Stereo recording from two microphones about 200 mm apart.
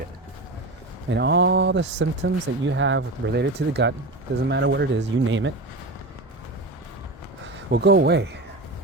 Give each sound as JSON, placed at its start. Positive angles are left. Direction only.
{"t": 1.1, "sound": "speech", "side_deg": -60}
{"t": 7.4, "sound": "speech", "side_deg": -55}